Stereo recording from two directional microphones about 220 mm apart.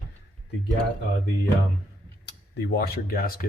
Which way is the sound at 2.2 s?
50° left (ahead or behind).